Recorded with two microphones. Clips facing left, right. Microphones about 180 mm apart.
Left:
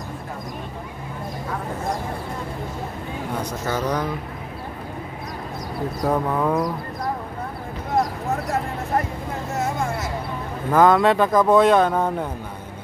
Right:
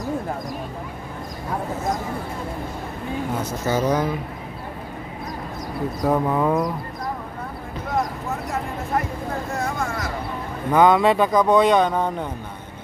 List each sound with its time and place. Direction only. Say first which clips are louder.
3.6 s speech: right 4 dB; 20° right (ahead or behind)
6.0 s speech: right 2 dB; 5° right (ahead or behind)
9.6 s vehicle: left 5 dB; 25° left (ahead or behind)
10.7 s speech: even; centre (ahead or behind)